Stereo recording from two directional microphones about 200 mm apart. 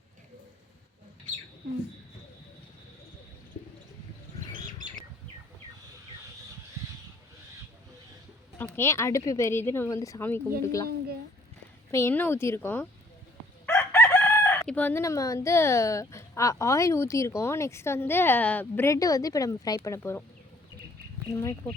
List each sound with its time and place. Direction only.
8.5 s speech: 10° left (ahead or behind)
10.8 s a woman's voice: 50° right (ahead or behind)
11.9 s speech: 15° left (ahead or behind)
13.7 s crowing: 10° left (ahead or behind)